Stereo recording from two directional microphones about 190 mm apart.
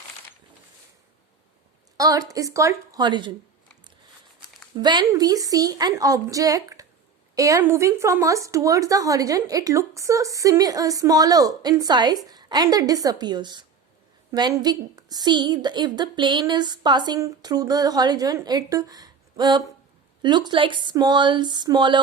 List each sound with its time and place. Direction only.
2.0 s speech: 20° right (ahead or behind)
4.8 s a woman's voice: 20° right (ahead or behind)